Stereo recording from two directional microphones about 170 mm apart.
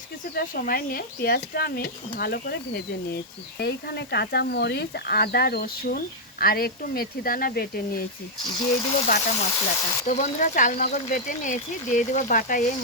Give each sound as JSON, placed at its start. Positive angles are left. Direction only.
{"t": 0.3, "sound": "speech", "side_deg": 55}
{"t": 8.4, "sound": "speech", "side_deg": 20}
{"t": 10.1, "sound": "speech", "side_deg": 45}